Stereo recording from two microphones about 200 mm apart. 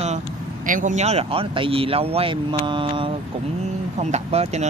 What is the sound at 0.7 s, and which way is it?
Speech, 40° right (ahead or behind).